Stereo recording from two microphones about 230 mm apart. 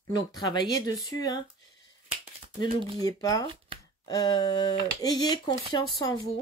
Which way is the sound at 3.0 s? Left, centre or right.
Centre.